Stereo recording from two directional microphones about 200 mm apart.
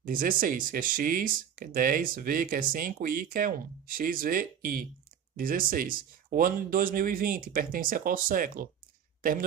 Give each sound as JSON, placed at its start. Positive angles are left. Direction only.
{"t": 0.0, "sound": "speech", "side_deg": -45}